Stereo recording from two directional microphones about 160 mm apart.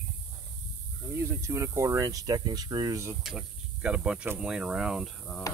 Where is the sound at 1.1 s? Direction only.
20° right (ahead or behind).